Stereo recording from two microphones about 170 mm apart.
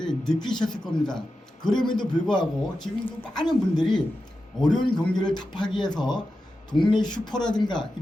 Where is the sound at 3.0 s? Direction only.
25° left (ahead or behind).